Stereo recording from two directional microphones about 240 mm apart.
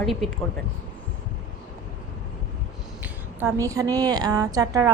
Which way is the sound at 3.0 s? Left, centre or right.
Centre.